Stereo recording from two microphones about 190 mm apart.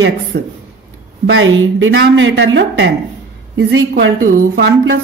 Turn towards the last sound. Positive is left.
turn(degrees=-55)  # may be behind; listen again after turning